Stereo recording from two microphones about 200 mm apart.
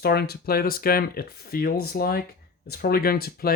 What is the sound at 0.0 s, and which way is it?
Speech, 50° left (ahead or behind).